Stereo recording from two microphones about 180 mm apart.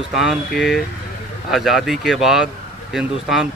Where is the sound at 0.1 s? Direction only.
Centre (ahead or behind).